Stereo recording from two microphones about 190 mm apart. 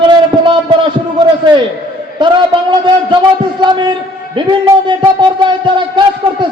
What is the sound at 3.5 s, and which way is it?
A man's voice, 25° right (ahead or behind).